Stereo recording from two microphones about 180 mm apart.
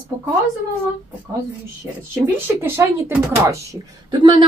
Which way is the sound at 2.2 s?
15° right (ahead or behind).